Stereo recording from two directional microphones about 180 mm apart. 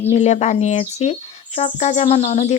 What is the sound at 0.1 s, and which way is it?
Speech, 40° left (ahead or behind).